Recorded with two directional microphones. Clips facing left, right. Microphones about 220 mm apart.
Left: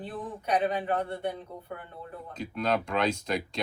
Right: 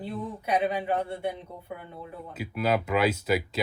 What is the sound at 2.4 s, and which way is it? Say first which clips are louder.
Speech: right 2 dB; 5° right (ahead or behind).